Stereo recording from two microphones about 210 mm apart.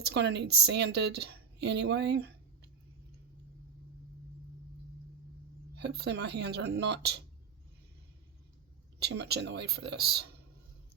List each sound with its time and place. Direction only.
0.1 s a woman's voice: 55° right (ahead or behind)
5.7 s a woman's voice: 55° right (ahead or behind)
9.0 s a woman's voice: 50° right (ahead or behind)